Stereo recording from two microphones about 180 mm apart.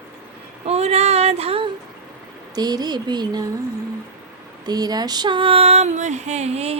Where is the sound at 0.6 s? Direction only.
35° right (ahead or behind).